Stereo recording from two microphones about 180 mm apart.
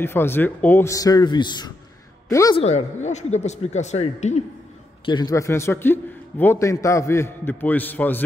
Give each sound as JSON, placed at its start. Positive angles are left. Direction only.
{"t": 0.0, "sound": "a man's voice", "side_deg": 10}
{"t": 2.5, "sound": "a man's voice", "side_deg": 35}
{"t": 5.0, "sound": "a man's voice", "side_deg": 25}